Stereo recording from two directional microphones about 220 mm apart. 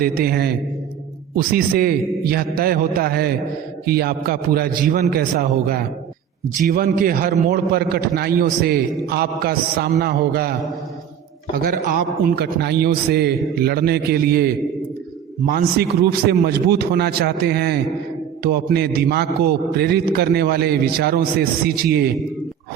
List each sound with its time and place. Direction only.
0.0 s a man's voice: 40° right (ahead or behind)
11.5 s a man's voice: 40° right (ahead or behind)